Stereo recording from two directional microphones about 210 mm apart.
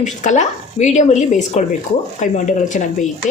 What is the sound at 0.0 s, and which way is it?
Speech, 35° left (ahead or behind).